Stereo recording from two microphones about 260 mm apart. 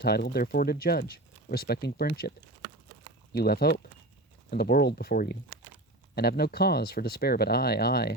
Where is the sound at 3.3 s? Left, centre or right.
Left.